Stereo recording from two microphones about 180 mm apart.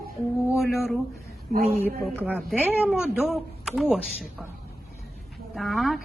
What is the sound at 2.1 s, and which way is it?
A woman's voice, 10° right (ahead or behind).